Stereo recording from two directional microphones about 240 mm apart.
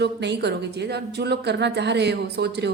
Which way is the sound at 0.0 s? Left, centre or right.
Right.